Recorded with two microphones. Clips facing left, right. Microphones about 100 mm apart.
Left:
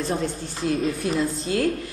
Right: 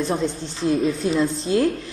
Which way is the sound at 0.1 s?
20° right (ahead or behind).